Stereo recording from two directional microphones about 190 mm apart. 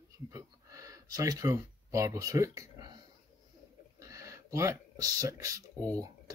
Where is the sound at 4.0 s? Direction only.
15° right (ahead or behind).